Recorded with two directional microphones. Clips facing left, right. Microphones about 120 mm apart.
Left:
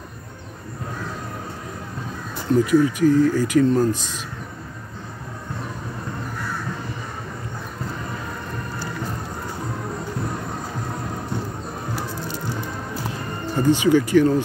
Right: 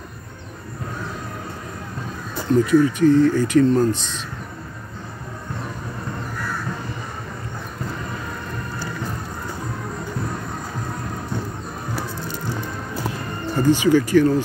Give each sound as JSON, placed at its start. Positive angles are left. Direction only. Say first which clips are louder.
{"t": 2.5, "sound": "speech", "louder": "right 1 dB", "side_deg": 10}
{"t": 13.6, "sound": "speech", "louder": "right 1 dB", "side_deg": 20}